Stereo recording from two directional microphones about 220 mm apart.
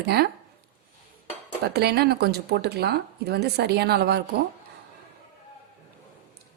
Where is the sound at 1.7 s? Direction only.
45° right (ahead or behind).